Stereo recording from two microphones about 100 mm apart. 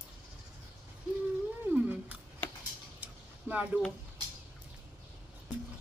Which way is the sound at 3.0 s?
15° right (ahead or behind).